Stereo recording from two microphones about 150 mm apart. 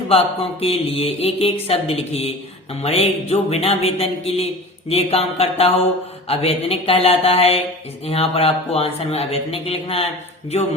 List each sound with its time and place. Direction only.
0.1 s speech: 40° left (ahead or behind)
2.8 s a sound: 40° left (ahead or behind)
6.2 s speech: 40° left (ahead or behind)